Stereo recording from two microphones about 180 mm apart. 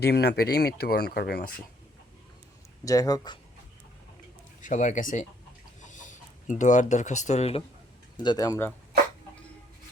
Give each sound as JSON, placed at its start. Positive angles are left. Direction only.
{"t": 0.0, "sound": "speech", "side_deg": 65}
{"t": 2.8, "sound": "speech", "side_deg": 20}
{"t": 4.6, "sound": "speech", "side_deg": 45}
{"t": 8.1, "sound": "speech", "side_deg": 25}